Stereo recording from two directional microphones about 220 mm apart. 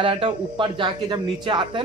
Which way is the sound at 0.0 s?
25° right (ahead or behind).